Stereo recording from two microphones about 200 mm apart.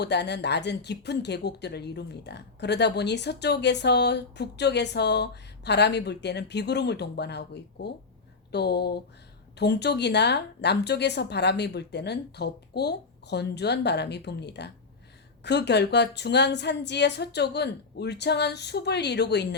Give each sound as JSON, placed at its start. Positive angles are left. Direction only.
{"t": 0.0, "sound": "a woman's voice", "side_deg": 55}